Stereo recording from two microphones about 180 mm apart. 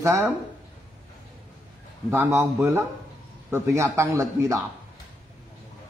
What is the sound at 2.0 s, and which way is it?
A man's voice, 15° right (ahead or behind).